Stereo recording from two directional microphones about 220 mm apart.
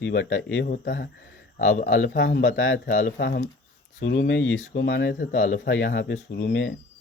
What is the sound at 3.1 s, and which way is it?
Speech, 50° left (ahead or behind).